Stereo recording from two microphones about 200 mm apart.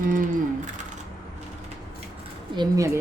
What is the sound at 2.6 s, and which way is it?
Speech, 15° right (ahead or behind).